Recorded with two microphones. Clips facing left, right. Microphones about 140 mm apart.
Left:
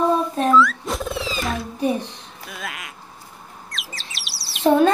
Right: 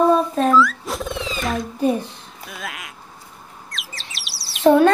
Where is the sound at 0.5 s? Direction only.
Centre (ahead or behind).